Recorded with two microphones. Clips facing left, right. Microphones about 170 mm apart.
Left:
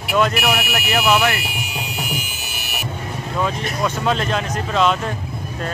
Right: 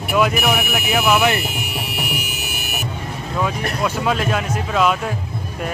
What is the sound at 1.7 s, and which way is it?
Music, 65° right (ahead or behind).